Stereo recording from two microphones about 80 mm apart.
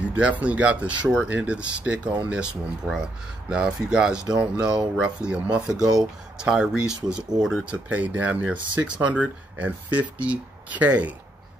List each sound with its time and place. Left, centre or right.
0.0 s speech: centre